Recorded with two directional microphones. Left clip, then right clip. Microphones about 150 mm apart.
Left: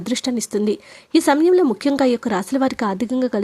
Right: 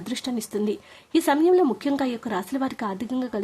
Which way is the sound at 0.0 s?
35° left (ahead or behind).